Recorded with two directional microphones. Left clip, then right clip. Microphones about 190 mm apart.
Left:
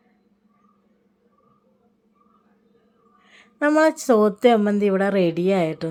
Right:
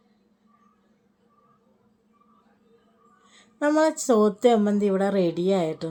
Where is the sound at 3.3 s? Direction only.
15° left (ahead or behind).